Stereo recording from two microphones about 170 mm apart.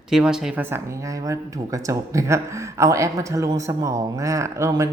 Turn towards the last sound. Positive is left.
turn(degrees=-20)  # may be behind; listen again after turning